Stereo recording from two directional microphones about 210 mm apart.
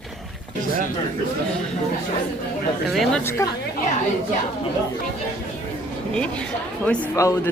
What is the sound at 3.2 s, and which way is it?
Speech, 15° left (ahead or behind).